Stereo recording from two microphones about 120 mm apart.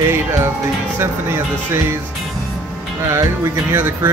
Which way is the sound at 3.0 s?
25° right (ahead or behind).